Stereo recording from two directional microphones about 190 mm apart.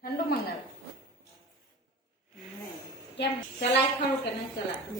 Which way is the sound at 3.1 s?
65° left (ahead or behind).